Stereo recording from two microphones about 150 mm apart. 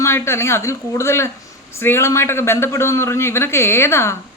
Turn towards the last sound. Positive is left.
turn(degrees=15)  # may be behind; listen again after turning